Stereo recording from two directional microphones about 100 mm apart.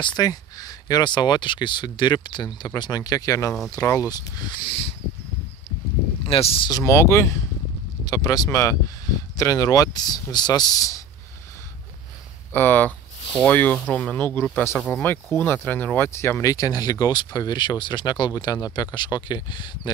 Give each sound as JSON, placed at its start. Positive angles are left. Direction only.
{"t": 0.0, "sound": "speech", "side_deg": 40}
{"t": 4.6, "sound": "a sound", "side_deg": 65}
{"t": 6.2, "sound": "speech", "side_deg": 75}
{"t": 6.8, "sound": "speech", "side_deg": 30}
{"t": 8.0, "sound": "speech", "side_deg": 40}
{"t": 12.5, "sound": "speech", "side_deg": 20}